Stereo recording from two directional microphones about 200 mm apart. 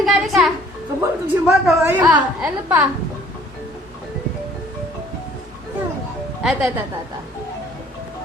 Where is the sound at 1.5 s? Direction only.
5° right (ahead or behind).